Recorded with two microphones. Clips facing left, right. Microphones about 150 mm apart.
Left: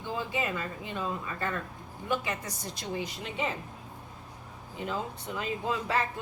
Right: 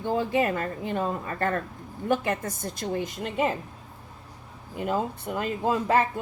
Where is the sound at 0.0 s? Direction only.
50° right (ahead or behind).